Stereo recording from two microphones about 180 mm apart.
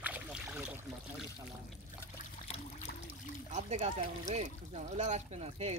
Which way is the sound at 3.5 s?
40° right (ahead or behind).